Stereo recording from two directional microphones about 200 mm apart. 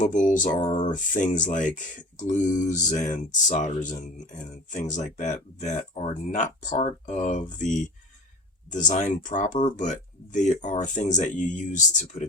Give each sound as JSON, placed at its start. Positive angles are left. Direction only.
{"t": 0.0, "sound": "speech", "side_deg": 40}